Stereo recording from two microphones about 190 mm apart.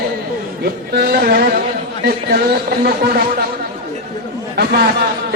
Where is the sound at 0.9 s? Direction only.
55° right (ahead or behind).